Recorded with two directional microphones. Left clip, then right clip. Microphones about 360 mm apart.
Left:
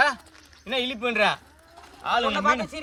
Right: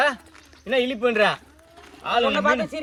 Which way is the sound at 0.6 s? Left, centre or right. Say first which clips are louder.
Right 5 dB; centre.